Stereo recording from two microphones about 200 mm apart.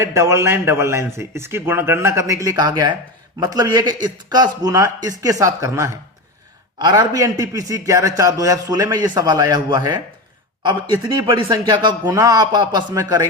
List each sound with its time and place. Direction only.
0.0 s a man's voice: 15° right (ahead or behind)